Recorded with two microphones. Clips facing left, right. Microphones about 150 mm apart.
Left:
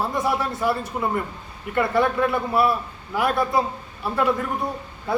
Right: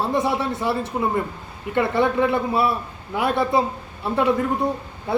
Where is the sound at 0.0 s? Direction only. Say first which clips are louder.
Right 2 dB; 25° right (ahead or behind).